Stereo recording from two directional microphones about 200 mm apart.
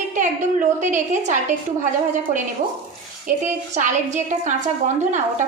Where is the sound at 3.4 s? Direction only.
40° right (ahead or behind).